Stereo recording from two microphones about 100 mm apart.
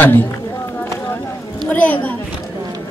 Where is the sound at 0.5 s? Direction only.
25° left (ahead or behind).